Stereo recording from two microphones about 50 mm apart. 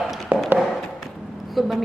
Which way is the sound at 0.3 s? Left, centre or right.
Right.